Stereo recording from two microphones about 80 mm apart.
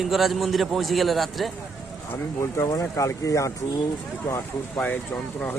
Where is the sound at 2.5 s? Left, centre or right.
Left.